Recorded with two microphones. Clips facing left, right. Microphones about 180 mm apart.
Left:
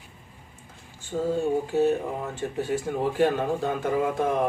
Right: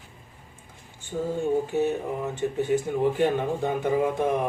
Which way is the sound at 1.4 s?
20° right (ahead or behind).